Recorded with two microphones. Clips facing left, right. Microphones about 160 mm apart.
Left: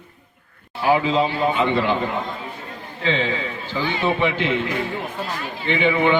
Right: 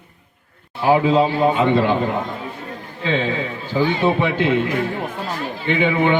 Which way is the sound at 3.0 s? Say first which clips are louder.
Right 2 dB; 55° right (ahead or behind).